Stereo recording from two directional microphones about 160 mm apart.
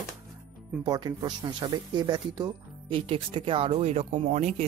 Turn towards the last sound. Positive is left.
turn(degrees=-45)  # may be behind; listen again after turning